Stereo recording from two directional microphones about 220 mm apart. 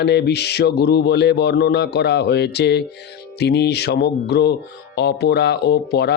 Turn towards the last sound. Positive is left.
turn(degrees=50)  # may be behind; listen again after turning